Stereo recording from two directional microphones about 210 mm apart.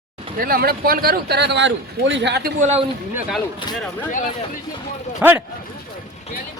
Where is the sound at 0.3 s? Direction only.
45° right (ahead or behind).